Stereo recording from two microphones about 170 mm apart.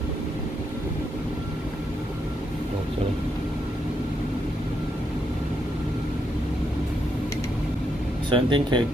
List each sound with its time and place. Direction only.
8.3 s speech: 30° right (ahead or behind)